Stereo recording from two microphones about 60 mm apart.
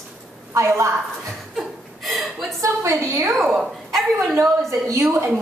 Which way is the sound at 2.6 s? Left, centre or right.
Right.